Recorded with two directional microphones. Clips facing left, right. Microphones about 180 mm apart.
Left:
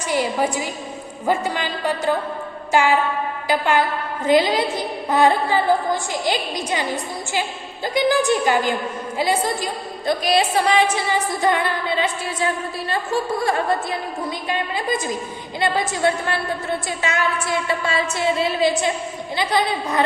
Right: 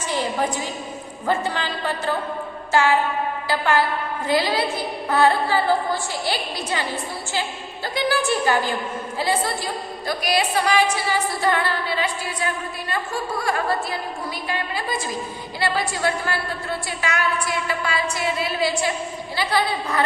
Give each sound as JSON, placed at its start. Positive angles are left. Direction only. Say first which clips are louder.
{"t": 0.1, "sound": "a woman's voice", "louder": "left 3 dB", "side_deg": 10}
{"t": 3.4, "sound": "a sound", "louder": "left 2 dB", "side_deg": 15}
{"t": 4.3, "sound": "a woman's voice", "louder": "left 5 dB", "side_deg": 20}
{"t": 10.1, "sound": "a woman's voice", "louder": "left 4 dB", "side_deg": 25}